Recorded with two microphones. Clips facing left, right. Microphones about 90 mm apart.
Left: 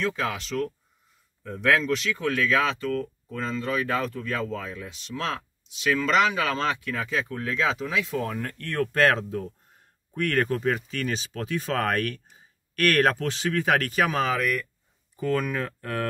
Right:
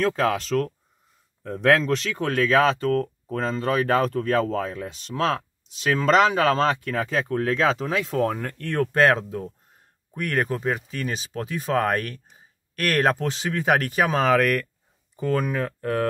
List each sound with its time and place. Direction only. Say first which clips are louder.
0.0 s speech: right 6 dB; 45° right (ahead or behind); by 14.2 s 25° right (ahead or behind)
14.2 s speech: right 6 dB; 60° right (ahead or behind)
15.1 s speech: right 2 dB; 30° right (ahead or behind)